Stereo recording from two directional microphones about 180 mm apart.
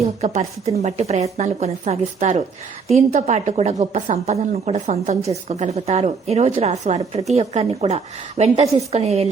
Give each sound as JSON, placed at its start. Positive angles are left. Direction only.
{"t": 0.2, "sound": "a woman's voice", "side_deg": -40}